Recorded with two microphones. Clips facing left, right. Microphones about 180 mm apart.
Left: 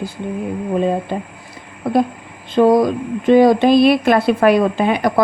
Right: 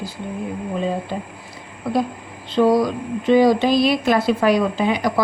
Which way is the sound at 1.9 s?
50° left (ahead or behind).